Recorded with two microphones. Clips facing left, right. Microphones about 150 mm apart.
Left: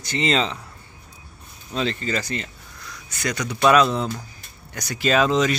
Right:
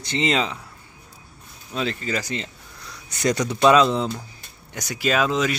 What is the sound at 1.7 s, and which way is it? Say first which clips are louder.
Speech: left 1 dB; 5° right (ahead or behind).